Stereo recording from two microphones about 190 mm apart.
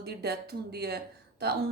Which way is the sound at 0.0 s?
60° right (ahead or behind).